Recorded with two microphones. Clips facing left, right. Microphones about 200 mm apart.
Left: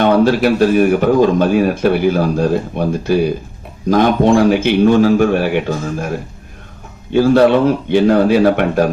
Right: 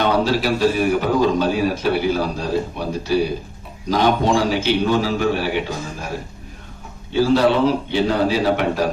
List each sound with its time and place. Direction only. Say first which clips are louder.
0.0 s a man's voice: left 7 dB; 55° left (ahead or behind)
7.1 s a man's voice: left 6 dB; 50° left (ahead or behind)